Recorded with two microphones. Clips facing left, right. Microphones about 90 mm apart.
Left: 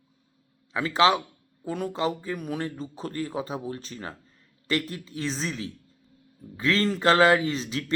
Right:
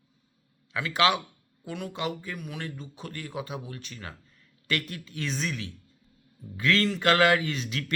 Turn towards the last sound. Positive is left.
turn(degrees=30)  # may be behind; listen again after turning